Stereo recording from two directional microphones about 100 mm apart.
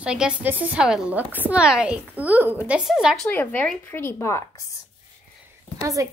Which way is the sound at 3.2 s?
15° left (ahead or behind).